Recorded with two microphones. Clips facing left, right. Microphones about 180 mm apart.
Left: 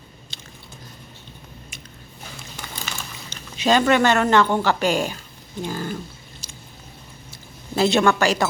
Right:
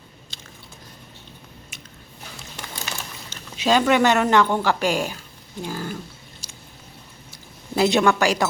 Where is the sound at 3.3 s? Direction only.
5° right (ahead or behind).